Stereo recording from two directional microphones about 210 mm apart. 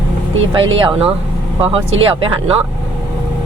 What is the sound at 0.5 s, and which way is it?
Speech, 25° right (ahead or behind).